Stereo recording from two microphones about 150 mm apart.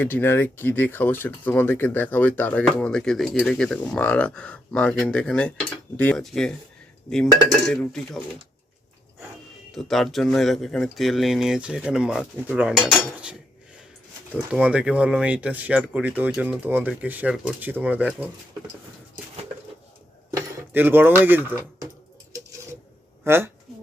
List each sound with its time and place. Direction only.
0.0 s speech: 15° left (ahead or behind)
7.7 s speech: 5° left (ahead or behind)
9.7 s speech: centre (ahead or behind)
14.6 s speech: 5° right (ahead or behind)
20.3 s speech: 15° right (ahead or behind)
23.2 s speech: 15° right (ahead or behind)